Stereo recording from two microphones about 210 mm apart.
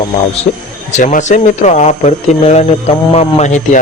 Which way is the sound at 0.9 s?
35° left (ahead or behind).